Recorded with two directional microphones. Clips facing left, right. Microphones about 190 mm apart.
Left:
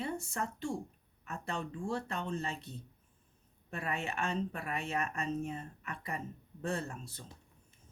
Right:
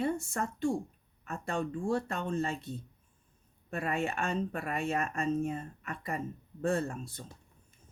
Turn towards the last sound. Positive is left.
turn(degrees=-50)  # may be behind; listen again after turning